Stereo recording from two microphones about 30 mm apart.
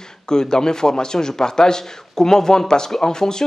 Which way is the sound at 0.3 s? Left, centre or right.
Left.